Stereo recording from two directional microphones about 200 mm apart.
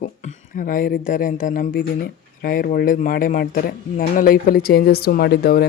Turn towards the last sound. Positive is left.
turn(degrees=50)  # may be behind; listen again after turning